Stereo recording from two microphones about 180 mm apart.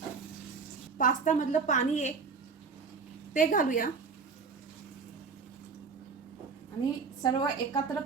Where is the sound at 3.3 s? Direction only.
50° left (ahead or behind).